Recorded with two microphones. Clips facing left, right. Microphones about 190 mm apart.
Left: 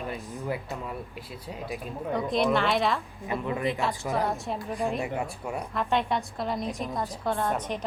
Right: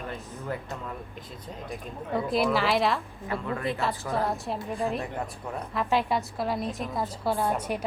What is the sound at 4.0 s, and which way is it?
Speech, centre (ahead or behind).